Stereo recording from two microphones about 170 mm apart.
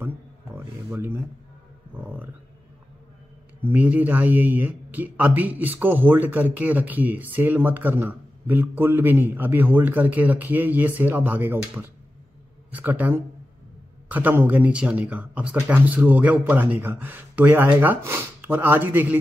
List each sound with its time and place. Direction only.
0.8 s speech: 15° right (ahead or behind)
3.6 s speech: 10° right (ahead or behind)